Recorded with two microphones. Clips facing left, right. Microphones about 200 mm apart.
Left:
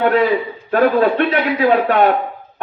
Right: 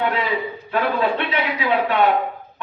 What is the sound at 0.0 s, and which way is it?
A man's voice, 45° left (ahead or behind).